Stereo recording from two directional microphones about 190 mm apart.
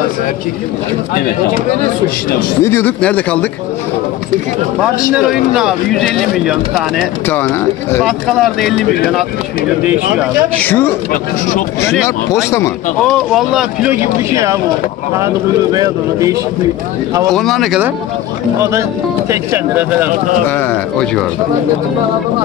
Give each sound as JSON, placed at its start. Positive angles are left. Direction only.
{"t": 2.6, "sound": "speech", "side_deg": 10}
{"t": 5.1, "sound": "speech", "side_deg": -5}
{"t": 10.5, "sound": "speech", "side_deg": 10}
{"t": 12.4, "sound": "speech", "side_deg": 15}
{"t": 13.0, "sound": "speech", "side_deg": 0}
{"t": 17.3, "sound": "speech", "side_deg": 0}
{"t": 18.6, "sound": "speech", "side_deg": -15}
{"t": 20.4, "sound": "speech", "side_deg": 10}